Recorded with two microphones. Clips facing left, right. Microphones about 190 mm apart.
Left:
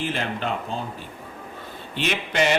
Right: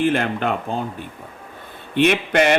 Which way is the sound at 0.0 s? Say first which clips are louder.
Right 8 dB; 55° right (ahead or behind).